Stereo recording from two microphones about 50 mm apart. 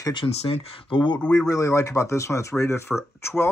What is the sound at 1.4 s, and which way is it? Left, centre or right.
Speech, left.